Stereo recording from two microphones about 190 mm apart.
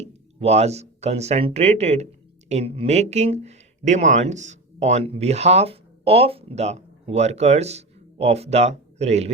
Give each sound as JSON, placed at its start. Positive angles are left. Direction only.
{"t": 0.0, "sound": "speech", "side_deg": -35}